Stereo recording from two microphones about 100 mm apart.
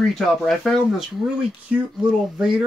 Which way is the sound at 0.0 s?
5° left (ahead or behind).